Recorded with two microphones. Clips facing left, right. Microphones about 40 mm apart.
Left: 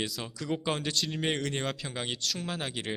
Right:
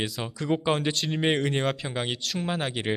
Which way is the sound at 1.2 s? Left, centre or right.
Right.